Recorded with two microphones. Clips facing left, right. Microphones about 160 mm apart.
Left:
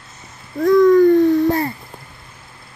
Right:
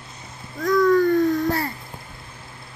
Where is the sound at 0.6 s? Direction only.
25° left (ahead or behind).